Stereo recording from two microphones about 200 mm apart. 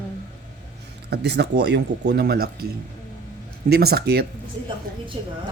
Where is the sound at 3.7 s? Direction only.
50° right (ahead or behind).